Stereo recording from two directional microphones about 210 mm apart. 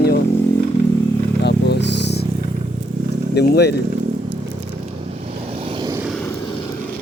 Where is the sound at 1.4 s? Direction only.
50° left (ahead or behind).